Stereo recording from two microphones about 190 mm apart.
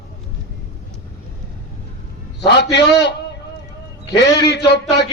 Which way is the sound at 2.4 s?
65° left (ahead or behind).